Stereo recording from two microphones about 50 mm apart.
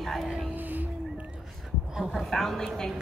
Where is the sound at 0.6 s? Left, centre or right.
Right.